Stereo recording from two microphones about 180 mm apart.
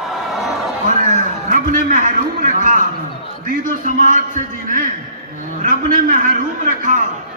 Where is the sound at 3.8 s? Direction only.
45° right (ahead or behind).